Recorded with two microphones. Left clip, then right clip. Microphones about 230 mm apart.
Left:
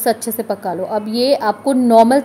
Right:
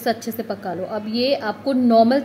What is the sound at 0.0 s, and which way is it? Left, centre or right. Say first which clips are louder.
A woman's voice: left 5 dB; centre.